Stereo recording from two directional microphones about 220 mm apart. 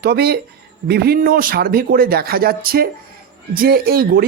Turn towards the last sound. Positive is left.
turn(degrees=-45)  # may be behind; listen again after turning